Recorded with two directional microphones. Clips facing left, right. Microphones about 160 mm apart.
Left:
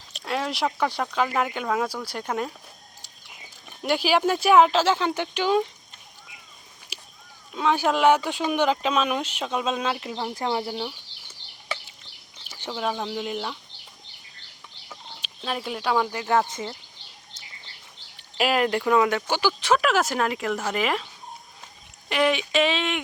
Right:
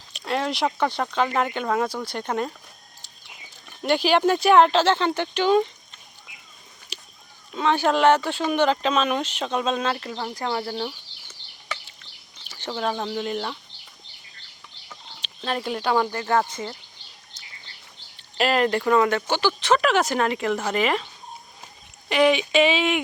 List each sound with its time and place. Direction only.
0.1 s speech: centre (ahead or behind)
3.7 s speech: 5° left (ahead or behind)
6.9 s a sound: 5° left (ahead or behind)
7.5 s speech: 5° left (ahead or behind)
10.0 s speech: 15° left (ahead or behind)
12.5 s speech: 10° left (ahead or behind)
14.8 s bird: 5° left (ahead or behind)
16.5 s speech: 20° left (ahead or behind)
18.3 s speech: 5° left (ahead or behind)
22.1 s speech: centre (ahead or behind)